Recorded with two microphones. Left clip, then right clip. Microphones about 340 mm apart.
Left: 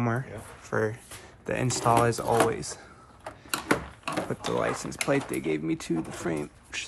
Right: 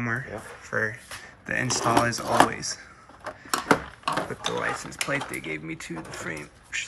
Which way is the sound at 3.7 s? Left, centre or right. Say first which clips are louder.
Right 5 dB; centre.